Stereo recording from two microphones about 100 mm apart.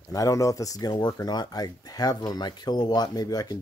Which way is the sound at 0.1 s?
35° left (ahead or behind).